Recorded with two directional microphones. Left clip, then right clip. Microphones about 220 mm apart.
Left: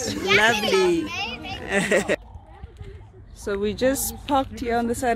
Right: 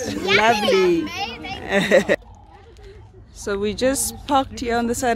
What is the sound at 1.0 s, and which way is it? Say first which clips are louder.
Children playing: right 2 dB; 25° right (ahead or behind).